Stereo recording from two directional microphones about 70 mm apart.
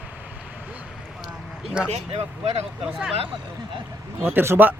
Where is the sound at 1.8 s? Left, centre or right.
Centre.